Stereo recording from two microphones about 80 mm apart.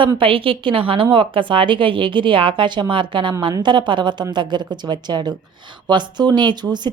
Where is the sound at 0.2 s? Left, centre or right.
Right.